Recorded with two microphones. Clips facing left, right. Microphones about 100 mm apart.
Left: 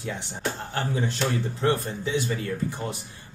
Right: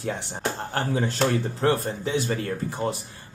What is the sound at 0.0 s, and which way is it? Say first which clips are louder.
Speech: right 2 dB; 45° right (ahead or behind).